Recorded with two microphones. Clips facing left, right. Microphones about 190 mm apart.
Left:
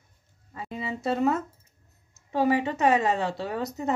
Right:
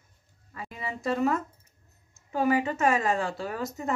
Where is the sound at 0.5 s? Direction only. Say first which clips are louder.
Left 3 dB; 25° left (ahead or behind).